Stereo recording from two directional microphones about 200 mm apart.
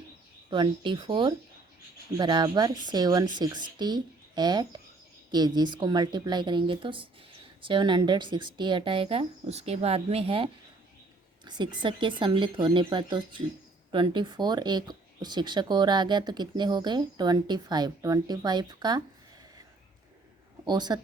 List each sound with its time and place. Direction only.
0.5 s speech: 25° right (ahead or behind)
20.7 s speech: 20° right (ahead or behind)